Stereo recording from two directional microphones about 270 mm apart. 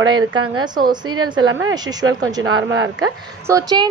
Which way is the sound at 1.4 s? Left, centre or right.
Right.